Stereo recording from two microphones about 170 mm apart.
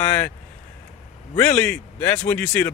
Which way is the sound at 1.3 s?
10° left (ahead or behind).